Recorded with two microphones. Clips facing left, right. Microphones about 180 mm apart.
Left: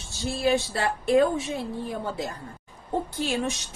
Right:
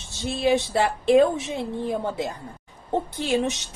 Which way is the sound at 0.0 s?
20° right (ahead or behind).